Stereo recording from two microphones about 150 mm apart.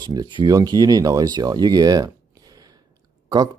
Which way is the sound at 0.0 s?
25° right (ahead or behind).